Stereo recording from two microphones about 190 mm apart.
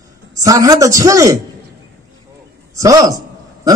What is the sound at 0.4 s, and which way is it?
A man's voice, 20° right (ahead or behind).